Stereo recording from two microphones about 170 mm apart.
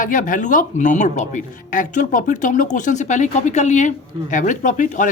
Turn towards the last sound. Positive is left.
turn(degrees=50)  # may be behind; listen again after turning